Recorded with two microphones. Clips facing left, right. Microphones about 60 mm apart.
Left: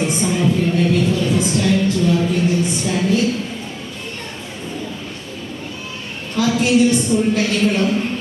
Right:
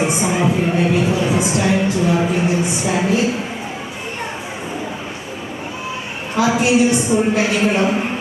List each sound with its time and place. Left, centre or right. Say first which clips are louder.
0.0 s a woman's voice: right 1 dB; centre
6.3 s a woman's voice: right 1 dB; centre